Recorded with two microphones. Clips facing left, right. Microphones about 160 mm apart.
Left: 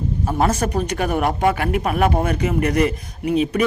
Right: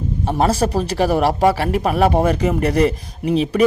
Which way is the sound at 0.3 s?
30° right (ahead or behind).